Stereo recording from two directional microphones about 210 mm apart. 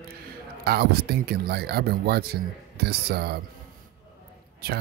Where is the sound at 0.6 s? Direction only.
50° right (ahead or behind).